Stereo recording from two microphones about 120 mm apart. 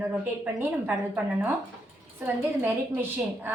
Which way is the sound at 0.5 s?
15° right (ahead or behind).